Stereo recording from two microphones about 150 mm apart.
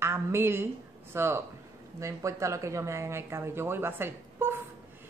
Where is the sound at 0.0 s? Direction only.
15° right (ahead or behind).